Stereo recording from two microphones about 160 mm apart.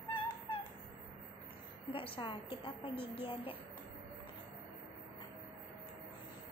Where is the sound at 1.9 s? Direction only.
35° left (ahead or behind).